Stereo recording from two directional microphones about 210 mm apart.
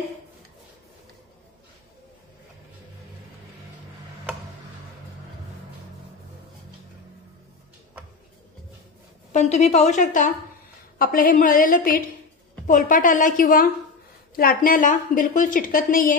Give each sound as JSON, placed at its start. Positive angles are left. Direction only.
{"t": 9.3, "sound": "a woman's voice", "side_deg": 35}